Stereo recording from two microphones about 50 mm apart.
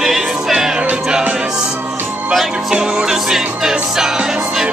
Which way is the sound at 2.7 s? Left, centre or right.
Centre.